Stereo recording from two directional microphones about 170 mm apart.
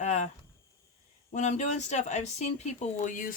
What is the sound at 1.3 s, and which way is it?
Speech, 40° left (ahead or behind).